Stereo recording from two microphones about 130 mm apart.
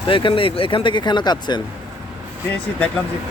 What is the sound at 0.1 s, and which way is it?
Speech, 40° left (ahead or behind).